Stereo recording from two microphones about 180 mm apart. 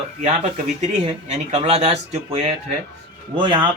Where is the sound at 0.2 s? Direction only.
35° right (ahead or behind).